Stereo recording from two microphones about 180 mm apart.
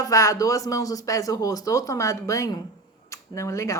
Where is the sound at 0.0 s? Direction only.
20° left (ahead or behind).